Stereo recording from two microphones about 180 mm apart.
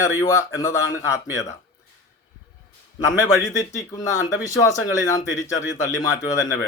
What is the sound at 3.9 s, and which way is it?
Speech, 20° left (ahead or behind).